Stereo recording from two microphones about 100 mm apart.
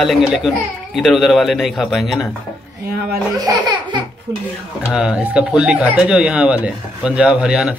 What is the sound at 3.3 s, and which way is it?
Speech, 45° right (ahead or behind).